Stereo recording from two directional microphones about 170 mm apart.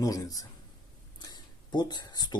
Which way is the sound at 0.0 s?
20° left (ahead or behind).